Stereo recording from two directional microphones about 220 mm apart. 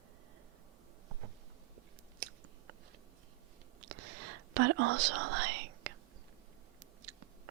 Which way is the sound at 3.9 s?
90° right.